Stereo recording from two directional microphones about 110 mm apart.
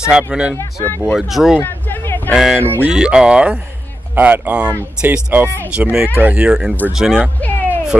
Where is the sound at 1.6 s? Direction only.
20° left (ahead or behind).